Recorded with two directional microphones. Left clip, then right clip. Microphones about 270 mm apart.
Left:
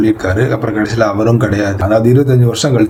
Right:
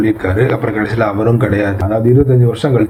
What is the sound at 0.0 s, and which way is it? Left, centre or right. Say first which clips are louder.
Speech: left 1 dB; centre.